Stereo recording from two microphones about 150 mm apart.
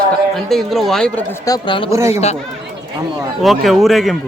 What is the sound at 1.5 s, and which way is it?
Speech, 35° left (ahead or behind).